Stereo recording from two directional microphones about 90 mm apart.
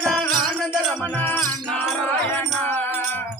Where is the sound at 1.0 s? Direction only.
20° left (ahead or behind).